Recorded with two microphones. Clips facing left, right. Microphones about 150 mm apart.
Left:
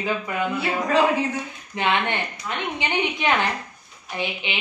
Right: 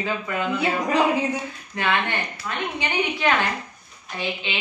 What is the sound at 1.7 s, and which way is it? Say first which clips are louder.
A woman's voice: left 1 dB; 20° left (ahead or behind).